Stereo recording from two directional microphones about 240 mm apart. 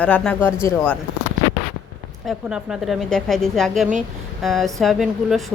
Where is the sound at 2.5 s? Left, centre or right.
Centre.